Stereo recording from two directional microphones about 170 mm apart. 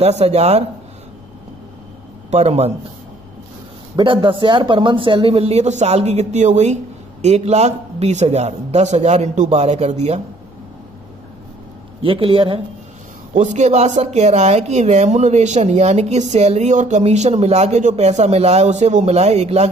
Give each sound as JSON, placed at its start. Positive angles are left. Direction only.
{"t": 0.0, "sound": "speech", "side_deg": -40}
{"t": 2.3, "sound": "speech", "side_deg": -40}
{"t": 3.9, "sound": "speech", "side_deg": -30}
{"t": 12.0, "sound": "speech", "side_deg": -30}
{"t": 13.3, "sound": "speech", "side_deg": -45}